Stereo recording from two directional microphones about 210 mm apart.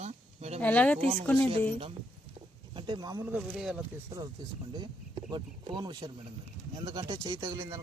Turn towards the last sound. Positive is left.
turn(degrees=-15)  # may be behind; listen again after turning